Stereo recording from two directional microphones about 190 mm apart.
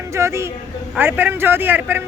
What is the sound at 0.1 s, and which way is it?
A woman's voice, 15° right (ahead or behind).